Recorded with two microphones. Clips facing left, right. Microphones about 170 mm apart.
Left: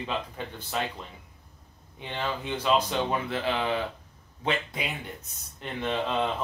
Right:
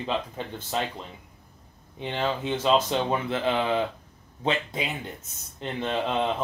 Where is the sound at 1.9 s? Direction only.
25° right (ahead or behind).